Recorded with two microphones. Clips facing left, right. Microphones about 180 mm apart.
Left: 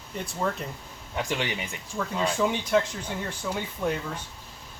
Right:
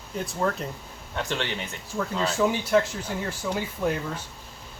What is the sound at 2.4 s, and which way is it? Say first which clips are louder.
Speech: right 2 dB; 5° right (ahead or behind).